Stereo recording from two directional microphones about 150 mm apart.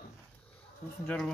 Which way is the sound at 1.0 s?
5° left (ahead or behind).